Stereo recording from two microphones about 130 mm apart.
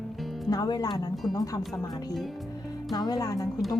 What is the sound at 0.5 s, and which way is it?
Speech, 30° left (ahead or behind).